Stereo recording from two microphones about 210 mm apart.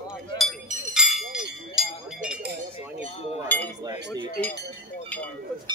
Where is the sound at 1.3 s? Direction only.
Centre (ahead or behind).